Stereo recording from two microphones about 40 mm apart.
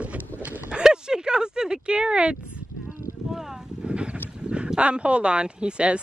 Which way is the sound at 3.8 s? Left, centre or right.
Right.